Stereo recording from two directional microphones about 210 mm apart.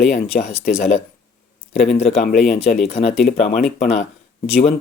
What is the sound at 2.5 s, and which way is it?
Speech, 35° left (ahead or behind).